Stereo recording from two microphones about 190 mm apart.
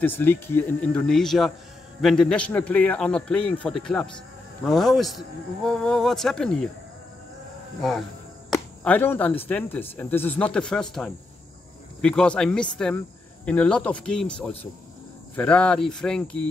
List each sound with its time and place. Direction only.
0.0 s a man's voice: 10° left (ahead or behind)
8.8 s a man's voice: 10° left (ahead or behind)